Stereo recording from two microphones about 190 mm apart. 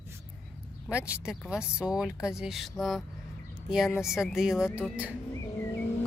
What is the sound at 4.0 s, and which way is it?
A woman's voice, centre (ahead or behind).